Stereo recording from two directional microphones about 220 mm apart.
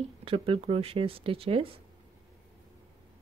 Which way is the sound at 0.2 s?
25° right (ahead or behind).